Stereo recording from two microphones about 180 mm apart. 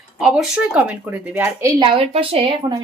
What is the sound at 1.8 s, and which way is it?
A woman's voice, 30° right (ahead or behind).